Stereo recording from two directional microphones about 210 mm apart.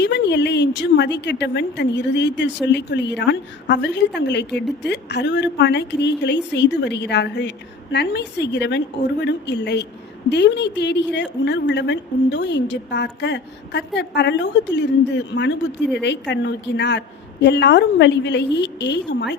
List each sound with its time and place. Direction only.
0.0 s a woman's voice: 55° left (ahead or behind)